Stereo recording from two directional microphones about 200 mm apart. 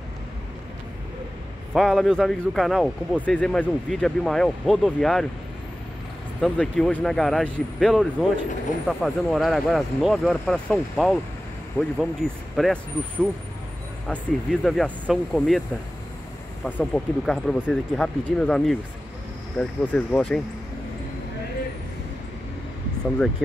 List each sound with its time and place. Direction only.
1.7 s a man's voice: centre (ahead or behind)
6.4 s a man's voice: 5° left (ahead or behind)
16.6 s a man's voice: 5° left (ahead or behind)